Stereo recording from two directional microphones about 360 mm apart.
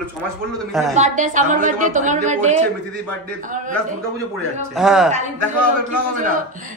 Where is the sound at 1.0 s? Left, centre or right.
Centre.